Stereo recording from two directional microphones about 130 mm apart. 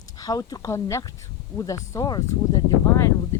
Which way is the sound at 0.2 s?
30° left (ahead or behind).